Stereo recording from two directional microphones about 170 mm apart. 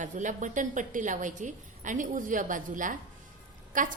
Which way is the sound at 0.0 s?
50° right (ahead or behind).